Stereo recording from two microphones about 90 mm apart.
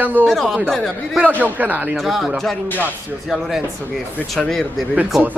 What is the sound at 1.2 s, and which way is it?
Speech, 20° right (ahead or behind).